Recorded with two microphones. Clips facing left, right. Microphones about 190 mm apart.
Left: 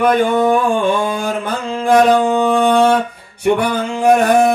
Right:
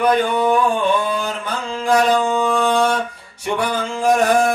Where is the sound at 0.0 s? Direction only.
50° left (ahead or behind).